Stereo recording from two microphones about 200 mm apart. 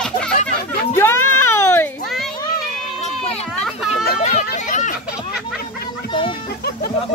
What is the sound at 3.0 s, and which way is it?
Run, 35° left (ahead or behind).